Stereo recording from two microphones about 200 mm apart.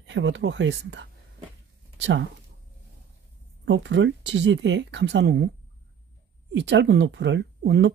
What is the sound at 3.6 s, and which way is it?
Speech, 65° right (ahead or behind).